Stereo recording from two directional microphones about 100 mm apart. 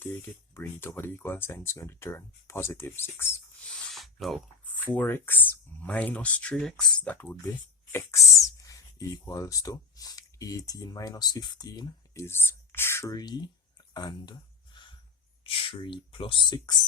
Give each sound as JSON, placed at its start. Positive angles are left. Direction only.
{"t": 0.5, "sound": "speech", "side_deg": 25}
{"t": 3.9, "sound": "a sound", "side_deg": 0}
{"t": 4.9, "sound": "speech", "side_deg": 20}
{"t": 7.9, "sound": "speech", "side_deg": 30}
{"t": 12.1, "sound": "speech", "side_deg": 25}
{"t": 13.1, "sound": "speech", "side_deg": 45}
{"t": 13.9, "sound": "a sound", "side_deg": 45}
{"t": 15.4, "sound": "speech", "side_deg": 65}